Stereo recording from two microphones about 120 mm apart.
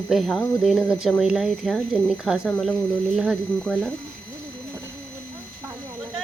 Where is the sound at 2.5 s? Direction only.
10° left (ahead or behind).